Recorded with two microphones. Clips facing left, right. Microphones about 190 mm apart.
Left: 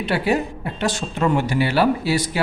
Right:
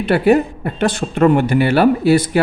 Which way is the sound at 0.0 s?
55° right (ahead or behind).